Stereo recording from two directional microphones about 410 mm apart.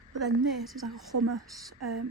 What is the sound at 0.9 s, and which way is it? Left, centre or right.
Speech, right.